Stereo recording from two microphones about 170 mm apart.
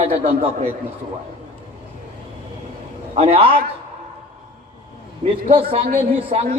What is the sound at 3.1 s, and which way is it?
Speech, 35° right (ahead or behind).